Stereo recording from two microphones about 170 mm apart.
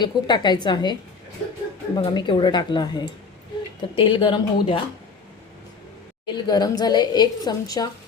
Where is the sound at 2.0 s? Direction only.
25° left (ahead or behind).